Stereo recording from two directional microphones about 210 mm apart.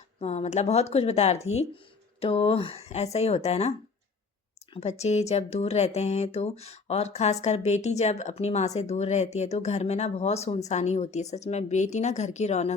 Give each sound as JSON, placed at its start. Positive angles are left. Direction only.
{"t": 0.2, "sound": "speech", "side_deg": 30}